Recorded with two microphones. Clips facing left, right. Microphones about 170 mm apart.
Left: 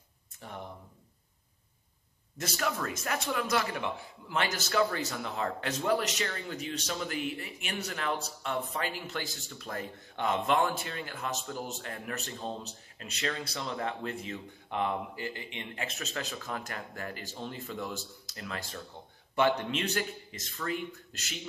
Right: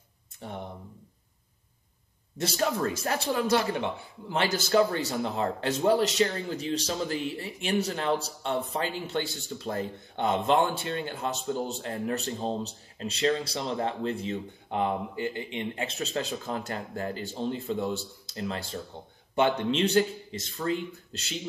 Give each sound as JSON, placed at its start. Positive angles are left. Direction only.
{"t": 0.4, "sound": "speech", "side_deg": -30}
{"t": 2.3, "sound": "speech", "side_deg": -30}